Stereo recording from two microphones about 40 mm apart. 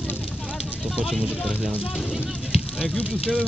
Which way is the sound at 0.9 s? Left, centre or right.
Centre.